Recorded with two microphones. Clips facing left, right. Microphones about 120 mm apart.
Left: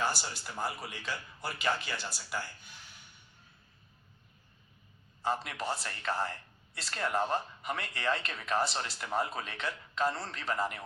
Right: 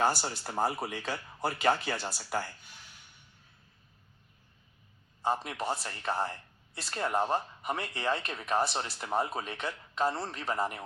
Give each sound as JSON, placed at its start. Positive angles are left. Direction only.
{"t": 0.0, "sound": "speech", "side_deg": -45}
{"t": 0.8, "sound": "speech", "side_deg": -55}
{"t": 1.5, "sound": "speech", "side_deg": -45}
{"t": 5.2, "sound": "speech", "side_deg": -20}